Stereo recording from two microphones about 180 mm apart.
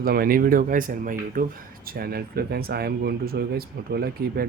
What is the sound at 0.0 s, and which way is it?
Speech, 55° right (ahead or behind).